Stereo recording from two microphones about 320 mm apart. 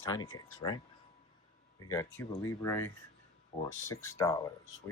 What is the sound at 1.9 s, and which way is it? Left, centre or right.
Speech, centre.